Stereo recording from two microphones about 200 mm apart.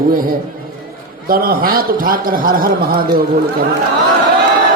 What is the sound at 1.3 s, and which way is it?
A man's voice, 45° right (ahead or behind).